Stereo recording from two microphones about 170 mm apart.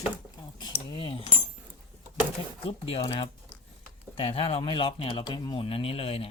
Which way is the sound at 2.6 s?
35° left (ahead or behind).